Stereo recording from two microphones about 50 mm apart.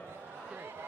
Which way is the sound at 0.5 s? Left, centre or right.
Right.